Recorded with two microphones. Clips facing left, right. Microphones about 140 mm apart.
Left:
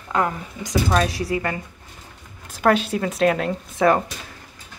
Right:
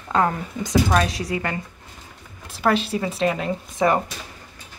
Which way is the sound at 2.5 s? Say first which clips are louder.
Left 2 dB; 45° left (ahead or behind).